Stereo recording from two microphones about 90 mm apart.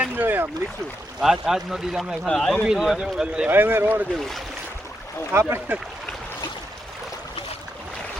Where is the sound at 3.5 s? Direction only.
25° right (ahead or behind).